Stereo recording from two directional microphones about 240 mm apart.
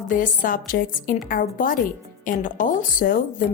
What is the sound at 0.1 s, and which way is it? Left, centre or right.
Speech, left.